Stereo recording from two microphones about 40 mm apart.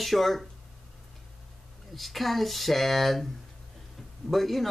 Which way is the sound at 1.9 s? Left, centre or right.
Centre.